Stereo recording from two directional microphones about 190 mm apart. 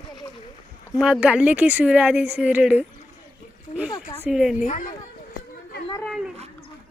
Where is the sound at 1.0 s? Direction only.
5° right (ahead or behind).